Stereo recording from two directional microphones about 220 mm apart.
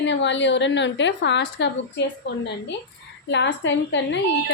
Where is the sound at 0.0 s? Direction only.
55° left (ahead or behind).